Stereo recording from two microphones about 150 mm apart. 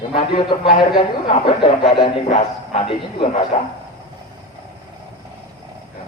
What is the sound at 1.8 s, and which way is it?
A man's voice, 40° left (ahead or behind).